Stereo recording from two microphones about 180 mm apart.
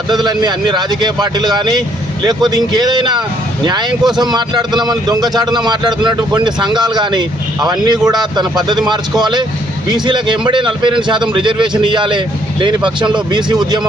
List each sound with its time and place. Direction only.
0.1 s speech: 25° right (ahead or behind)